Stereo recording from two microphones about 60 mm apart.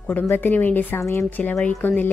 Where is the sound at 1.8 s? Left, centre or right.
Left.